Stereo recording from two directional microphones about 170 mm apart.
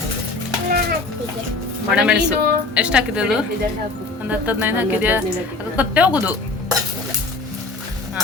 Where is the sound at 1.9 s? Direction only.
5° right (ahead or behind).